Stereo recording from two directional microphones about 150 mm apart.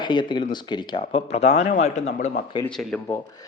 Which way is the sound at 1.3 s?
45° left (ahead or behind).